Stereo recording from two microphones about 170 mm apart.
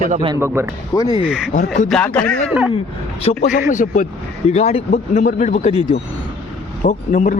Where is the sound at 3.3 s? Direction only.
35° left (ahead or behind).